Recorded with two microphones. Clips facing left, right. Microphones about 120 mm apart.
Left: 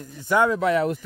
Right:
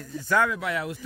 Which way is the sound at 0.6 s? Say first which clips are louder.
Left 9 dB; 35° left (ahead or behind).